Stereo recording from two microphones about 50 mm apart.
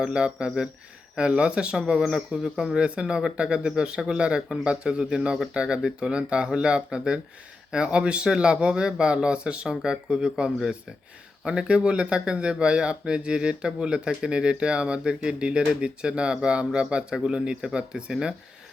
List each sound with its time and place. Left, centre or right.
0.0 s speech: centre